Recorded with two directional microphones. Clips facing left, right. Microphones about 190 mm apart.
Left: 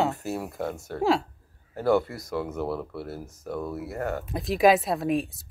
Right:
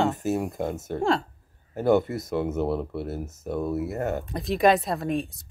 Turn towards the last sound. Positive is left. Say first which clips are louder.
# left 2 dB
turn(degrees=0)  # may be behind; listen again after turning